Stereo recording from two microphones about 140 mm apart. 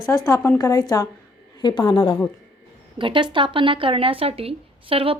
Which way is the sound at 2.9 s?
35° right (ahead or behind).